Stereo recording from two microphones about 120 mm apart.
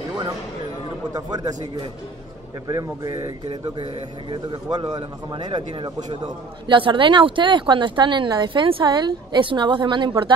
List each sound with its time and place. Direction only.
1.1 s a man's voice: 30° right (ahead or behind)
2.7 s speech: 30° right (ahead or behind)
3.8 s speech: 45° right (ahead or behind)
4.6 s a man's voice: 35° right (ahead or behind)